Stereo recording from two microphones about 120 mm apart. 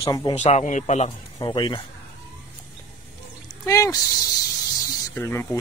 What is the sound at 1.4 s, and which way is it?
Speech, 40° left (ahead or behind).